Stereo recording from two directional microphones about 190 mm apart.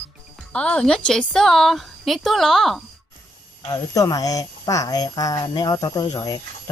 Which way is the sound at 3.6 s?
20° left (ahead or behind).